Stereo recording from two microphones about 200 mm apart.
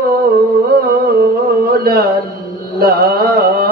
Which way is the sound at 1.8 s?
50° right (ahead or behind).